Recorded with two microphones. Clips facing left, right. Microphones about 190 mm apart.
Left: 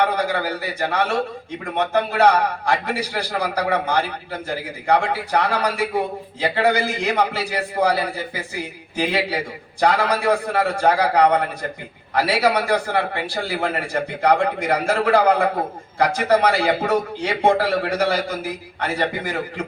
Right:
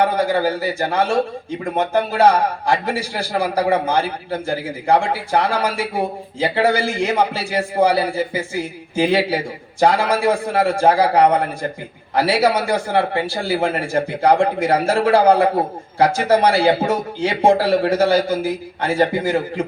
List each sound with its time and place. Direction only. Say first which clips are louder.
0.3 s a man's voice: right 5 dB; 25° right (ahead or behind)